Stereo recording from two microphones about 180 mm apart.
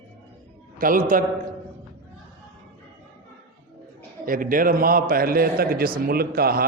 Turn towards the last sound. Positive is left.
turn(degrees=-55)  # may be behind; listen again after turning